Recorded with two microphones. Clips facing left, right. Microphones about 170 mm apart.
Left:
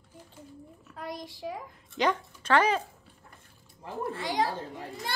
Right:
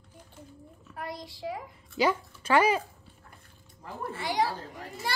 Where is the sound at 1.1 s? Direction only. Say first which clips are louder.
Left 2 dB; 15° left (ahead or behind).